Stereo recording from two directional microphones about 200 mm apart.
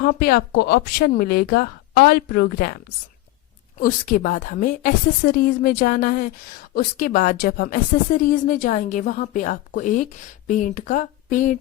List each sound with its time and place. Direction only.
0.0 s speech: 50° left (ahead or behind)
3.8 s a woman's voice: 40° left (ahead or behind)